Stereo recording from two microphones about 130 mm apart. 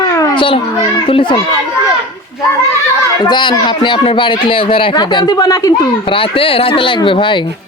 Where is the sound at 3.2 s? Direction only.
35° left (ahead or behind).